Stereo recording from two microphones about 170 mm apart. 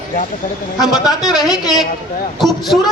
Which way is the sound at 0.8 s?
Centre (ahead or behind).